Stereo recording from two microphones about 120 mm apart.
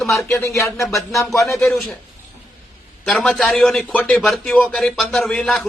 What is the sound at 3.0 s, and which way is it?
A man's voice, 5° left (ahead or behind).